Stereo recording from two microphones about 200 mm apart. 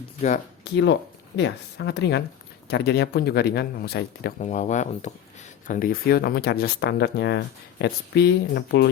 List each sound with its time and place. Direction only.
0.6 s speech: 60° left (ahead or behind)
4.4 s speech: 35° left (ahead or behind); by 8.9 s 55° left (ahead or behind)